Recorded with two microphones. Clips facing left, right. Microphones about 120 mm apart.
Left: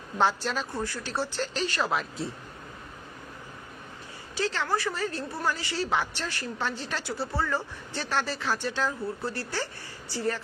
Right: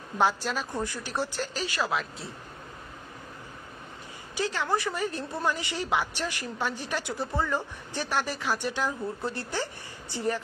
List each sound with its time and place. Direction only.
0.2 s a woman's voice: 10° right (ahead or behind)
4.4 s a woman's voice: 15° right (ahead or behind)